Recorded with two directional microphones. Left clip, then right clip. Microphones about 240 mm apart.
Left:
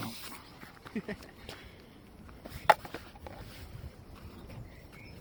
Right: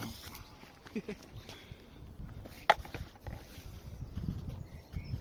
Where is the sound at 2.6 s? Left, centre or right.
Left.